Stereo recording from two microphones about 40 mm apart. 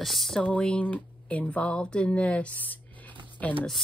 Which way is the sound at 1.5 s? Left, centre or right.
Left.